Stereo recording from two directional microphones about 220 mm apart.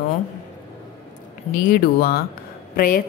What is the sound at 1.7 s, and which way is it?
A woman's voice, 45° left (ahead or behind).